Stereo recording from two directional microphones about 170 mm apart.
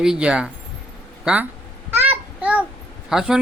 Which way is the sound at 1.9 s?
10° right (ahead or behind).